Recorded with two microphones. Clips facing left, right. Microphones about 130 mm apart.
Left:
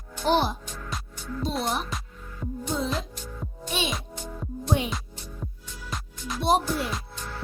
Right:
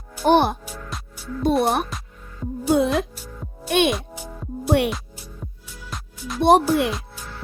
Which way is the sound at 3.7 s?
60° right (ahead or behind).